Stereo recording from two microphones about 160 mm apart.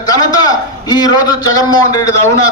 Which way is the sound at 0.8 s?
25° left (ahead or behind).